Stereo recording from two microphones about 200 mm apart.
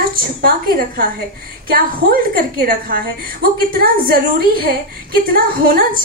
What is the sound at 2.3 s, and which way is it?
A woman's voice, 45° right (ahead or behind).